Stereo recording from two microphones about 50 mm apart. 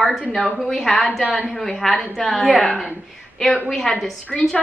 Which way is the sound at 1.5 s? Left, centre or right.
Centre.